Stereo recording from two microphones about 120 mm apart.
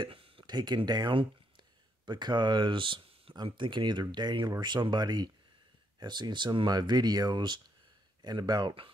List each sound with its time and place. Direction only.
0.0 s speech: 50° right (ahead or behind)